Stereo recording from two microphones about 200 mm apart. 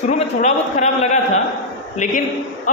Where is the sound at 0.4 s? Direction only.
35° left (ahead or behind).